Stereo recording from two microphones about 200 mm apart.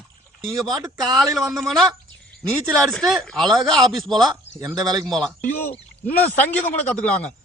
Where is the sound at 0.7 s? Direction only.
20° right (ahead or behind).